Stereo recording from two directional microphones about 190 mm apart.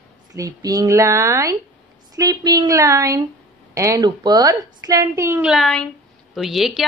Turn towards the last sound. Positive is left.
turn(degrees=0)  # may be behind; listen again after turning